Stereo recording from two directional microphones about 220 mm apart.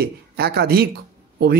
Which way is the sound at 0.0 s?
45° right (ahead or behind).